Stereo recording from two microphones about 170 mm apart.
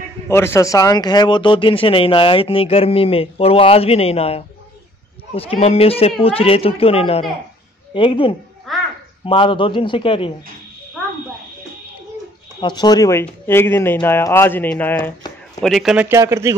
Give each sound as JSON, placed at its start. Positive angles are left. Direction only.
{"t": 0.3, "sound": "speech", "side_deg": 15}
{"t": 8.7, "sound": "music", "side_deg": 0}
{"t": 9.2, "sound": "speech", "side_deg": 30}
{"t": 12.5, "sound": "speech", "side_deg": 25}
{"t": 15.6, "sound": "speech", "side_deg": 0}
{"t": 16.1, "sound": "speech", "side_deg": -20}